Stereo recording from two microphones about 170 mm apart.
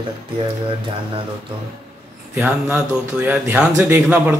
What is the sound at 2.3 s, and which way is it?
Speech, 10° right (ahead or behind).